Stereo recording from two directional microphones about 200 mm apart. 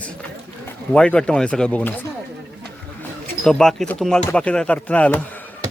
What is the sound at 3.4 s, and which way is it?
A man's voice, centre (ahead or behind).